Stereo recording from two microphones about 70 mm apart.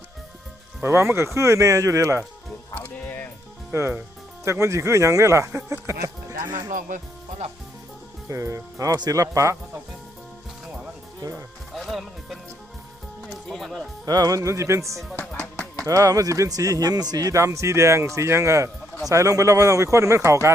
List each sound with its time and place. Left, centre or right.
0.8 s speech: right
2.7 s music: left
3.7 s speech: right
6.5 s speech: right
8.3 s speech: right
11.2 s music: right
11.7 s music: centre
13.3 s speech: centre
14.0 s speech: right
15.2 s music: centre
15.9 s speech: right